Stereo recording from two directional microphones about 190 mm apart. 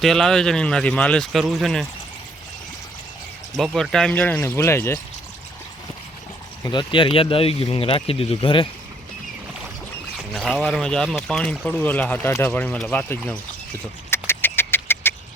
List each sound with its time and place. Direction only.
0.0 s speech: centre (ahead or behind)
3.5 s speech: centre (ahead or behind)
6.7 s speech: 25° left (ahead or behind)
10.3 s speech: centre (ahead or behind)
14.1 s a sound: 10° left (ahead or behind)